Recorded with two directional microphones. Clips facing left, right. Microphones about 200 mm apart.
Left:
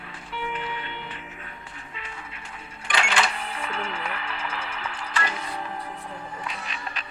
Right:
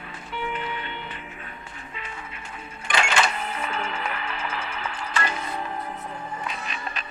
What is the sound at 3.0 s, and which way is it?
Cash register, 45° right (ahead or behind).